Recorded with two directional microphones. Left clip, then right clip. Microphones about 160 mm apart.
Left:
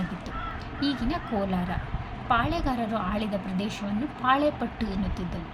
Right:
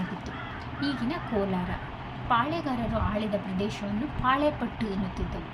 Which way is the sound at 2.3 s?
25° left (ahead or behind).